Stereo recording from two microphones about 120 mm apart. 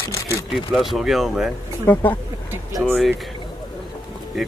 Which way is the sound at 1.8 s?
15° left (ahead or behind).